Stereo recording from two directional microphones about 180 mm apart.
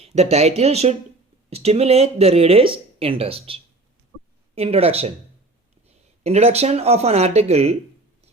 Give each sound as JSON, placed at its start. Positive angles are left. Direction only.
{"t": 0.0, "sound": "speech", "side_deg": -35}
{"t": 6.2, "sound": "speech", "side_deg": -35}